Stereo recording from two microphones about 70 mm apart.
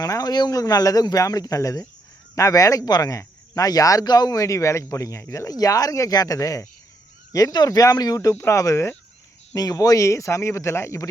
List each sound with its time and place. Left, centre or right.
0.0 s speech: left
0.6 s speech: left
7.3 s speech: left
8.4 s speech: left
9.6 s speech: left